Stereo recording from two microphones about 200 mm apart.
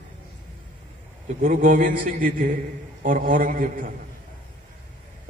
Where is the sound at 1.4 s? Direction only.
40° right (ahead or behind).